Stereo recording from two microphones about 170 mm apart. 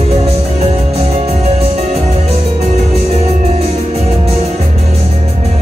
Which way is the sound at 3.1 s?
40° right (ahead or behind).